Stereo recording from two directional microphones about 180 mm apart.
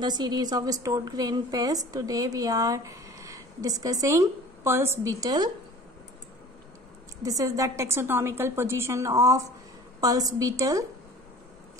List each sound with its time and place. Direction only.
0.0 s a woman's voice: 25° right (ahead or behind)
7.2 s a woman's voice: 20° right (ahead or behind)